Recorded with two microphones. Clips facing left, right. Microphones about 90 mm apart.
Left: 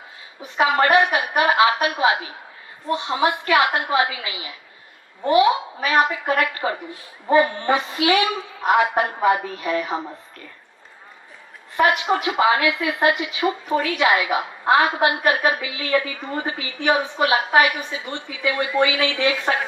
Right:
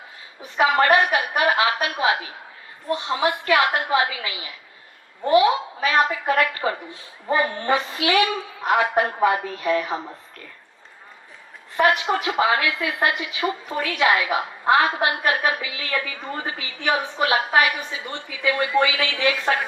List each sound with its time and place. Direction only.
0.4 s a woman's voice: 20° left (ahead or behind)
5.8 s a woman's voice: 20° left (ahead or behind)
11.8 s a woman's voice: 20° left (ahead or behind)